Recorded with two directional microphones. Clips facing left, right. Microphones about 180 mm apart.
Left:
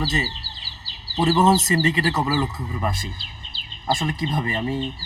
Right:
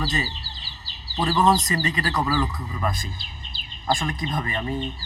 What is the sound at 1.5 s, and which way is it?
Speech, 25° left (ahead or behind).